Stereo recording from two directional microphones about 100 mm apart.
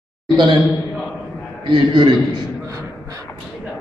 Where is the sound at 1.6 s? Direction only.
55° right (ahead or behind).